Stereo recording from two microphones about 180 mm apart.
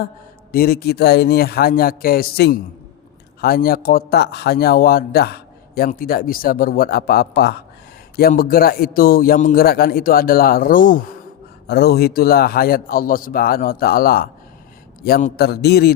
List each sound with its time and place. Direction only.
0.5 s a man's voice: 60° left (ahead or behind)
11.7 s a man's voice: 65° left (ahead or behind)